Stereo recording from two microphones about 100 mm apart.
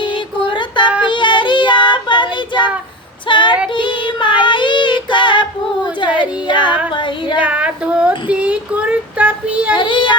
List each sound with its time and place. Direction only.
0.4 s child singing: 55° left (ahead or behind)
3.2 s female singing: 55° left (ahead or behind)
3.8 s child singing: 55° left (ahead or behind)
6.0 s a sound: 55° left (ahead or behind)
6.9 s child singing: 55° left (ahead or behind)
7.4 s child singing: 10° right (ahead or behind)
9.7 s child singing: 55° left (ahead or behind)